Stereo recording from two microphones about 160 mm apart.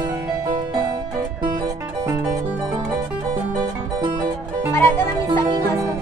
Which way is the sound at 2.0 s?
25° right (ahead or behind).